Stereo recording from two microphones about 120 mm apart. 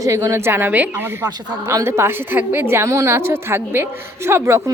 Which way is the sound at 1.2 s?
25° right (ahead or behind).